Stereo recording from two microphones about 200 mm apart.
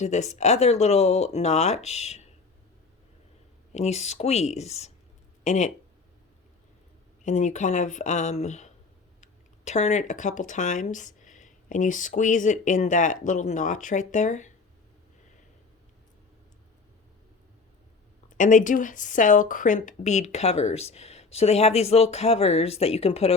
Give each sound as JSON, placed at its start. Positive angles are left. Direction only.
{"t": 0.0, "sound": "speech", "side_deg": 35}
{"t": 3.7, "sound": "speech", "side_deg": 35}
{"t": 7.3, "sound": "speech", "side_deg": 40}
{"t": 18.3, "sound": "speech", "side_deg": 40}